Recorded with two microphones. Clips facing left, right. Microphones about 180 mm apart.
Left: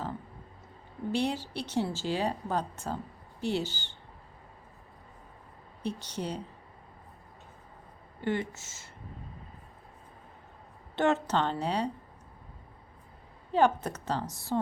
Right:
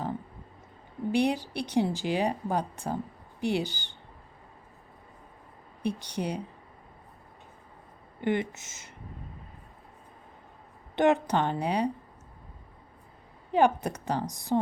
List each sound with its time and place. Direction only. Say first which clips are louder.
1.1 s speech: right 4 dB; 15° right (ahead or behind)
5.8 s speech: right 4 dB; 15° right (ahead or behind)
8.2 s speech: right 3 dB; 15° right (ahead or behind)
10.9 s speech: right 3 dB; 15° right (ahead or behind)
13.5 s speech: right 2 dB; 15° right (ahead or behind)